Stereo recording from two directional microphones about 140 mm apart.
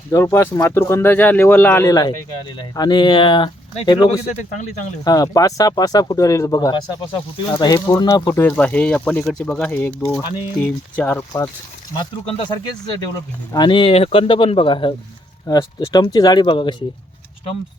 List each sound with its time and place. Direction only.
0.1 s speech: 20° left (ahead or behind)
11.9 s speech: 35° left (ahead or behind)
13.7 s speech: 40° left (ahead or behind)